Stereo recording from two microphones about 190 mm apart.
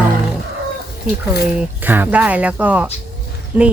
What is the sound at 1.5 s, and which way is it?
Speech, 10° right (ahead or behind).